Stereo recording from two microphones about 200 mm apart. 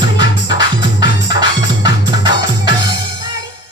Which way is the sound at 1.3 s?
20° right (ahead or behind).